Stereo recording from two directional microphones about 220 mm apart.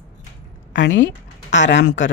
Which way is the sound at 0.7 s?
60° left (ahead or behind).